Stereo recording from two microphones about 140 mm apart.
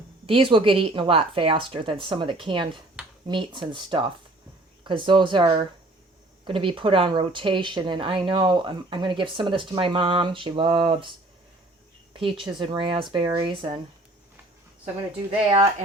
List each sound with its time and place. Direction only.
0.3 s speech: 40° right (ahead or behind)
12.1 s speech: 40° right (ahead or behind)